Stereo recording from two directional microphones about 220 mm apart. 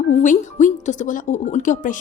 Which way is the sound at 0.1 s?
30° left (ahead or behind).